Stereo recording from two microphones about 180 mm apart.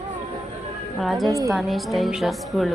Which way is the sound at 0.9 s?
Centre (ahead or behind).